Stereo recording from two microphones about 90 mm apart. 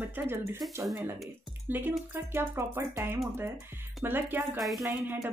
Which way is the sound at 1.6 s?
20° right (ahead or behind).